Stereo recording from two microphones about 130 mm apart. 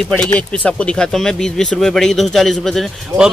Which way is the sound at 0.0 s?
10° left (ahead or behind).